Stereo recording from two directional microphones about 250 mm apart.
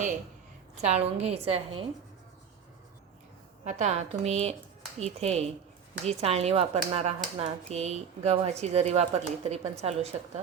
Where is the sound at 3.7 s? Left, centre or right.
Right.